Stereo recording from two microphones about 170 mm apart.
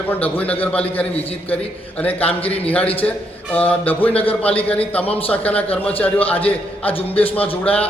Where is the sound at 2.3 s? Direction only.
10° left (ahead or behind).